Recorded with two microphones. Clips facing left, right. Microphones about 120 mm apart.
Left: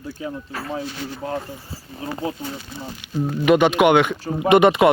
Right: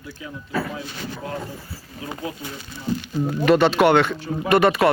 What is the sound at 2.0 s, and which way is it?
Speech, 35° left (ahead or behind).